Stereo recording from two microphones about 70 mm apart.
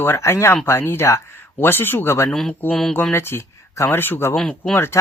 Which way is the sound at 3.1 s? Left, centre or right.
Left.